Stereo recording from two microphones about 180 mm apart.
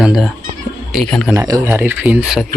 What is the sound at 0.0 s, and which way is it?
Speech, 5° right (ahead or behind).